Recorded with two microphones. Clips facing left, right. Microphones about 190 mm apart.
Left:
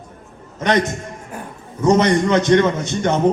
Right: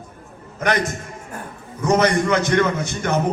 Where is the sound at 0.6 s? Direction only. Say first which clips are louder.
Left 3 dB; 20° left (ahead or behind).